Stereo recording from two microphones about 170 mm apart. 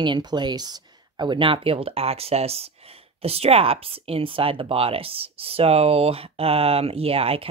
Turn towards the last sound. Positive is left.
turn(degrees=-35)  # may be behind; listen again after turning